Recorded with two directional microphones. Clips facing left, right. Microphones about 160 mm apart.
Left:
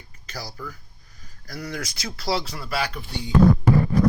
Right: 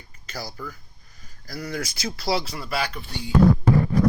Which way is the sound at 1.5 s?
Centre (ahead or behind).